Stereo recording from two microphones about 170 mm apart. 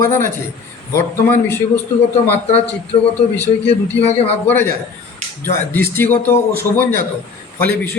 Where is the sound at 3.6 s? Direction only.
35° left (ahead or behind).